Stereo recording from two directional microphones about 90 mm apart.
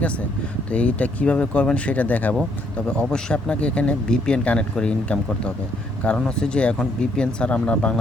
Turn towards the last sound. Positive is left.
turn(degrees=10)  # may be behind; listen again after turning